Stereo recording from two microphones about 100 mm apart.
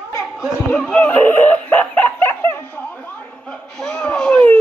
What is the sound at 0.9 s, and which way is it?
Laughter, 15° left (ahead or behind).